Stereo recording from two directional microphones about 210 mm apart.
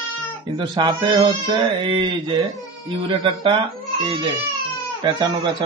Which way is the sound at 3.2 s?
25° right (ahead or behind).